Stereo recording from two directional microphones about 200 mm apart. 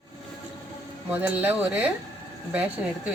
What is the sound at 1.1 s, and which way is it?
Speech, 10° right (ahead or behind).